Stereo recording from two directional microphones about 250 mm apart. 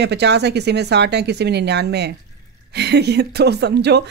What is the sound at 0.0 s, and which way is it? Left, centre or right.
Speech, right.